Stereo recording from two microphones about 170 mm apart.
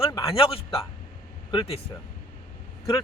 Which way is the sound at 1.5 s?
30° left (ahead or behind).